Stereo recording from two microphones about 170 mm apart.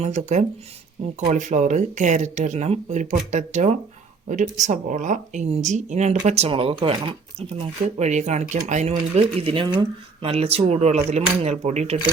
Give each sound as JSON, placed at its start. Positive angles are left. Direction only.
{"t": 0.0, "sound": "speech", "side_deg": -45}